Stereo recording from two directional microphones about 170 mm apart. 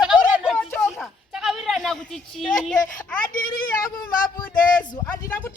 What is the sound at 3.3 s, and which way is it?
Speech, 55° left (ahead or behind).